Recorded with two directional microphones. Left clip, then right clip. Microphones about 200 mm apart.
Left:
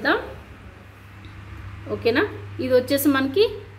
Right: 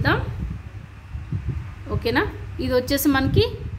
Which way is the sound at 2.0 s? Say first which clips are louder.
Left 2 dB; 25° right (ahead or behind).